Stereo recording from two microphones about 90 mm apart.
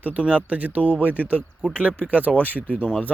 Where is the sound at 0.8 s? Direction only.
20° left (ahead or behind).